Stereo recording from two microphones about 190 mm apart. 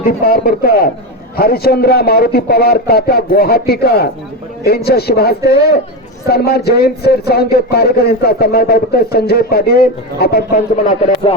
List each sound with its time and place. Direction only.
0.0 s a man's voice: 50° left (ahead or behind)